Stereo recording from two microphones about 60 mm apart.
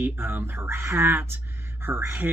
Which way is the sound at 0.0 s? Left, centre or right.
Right.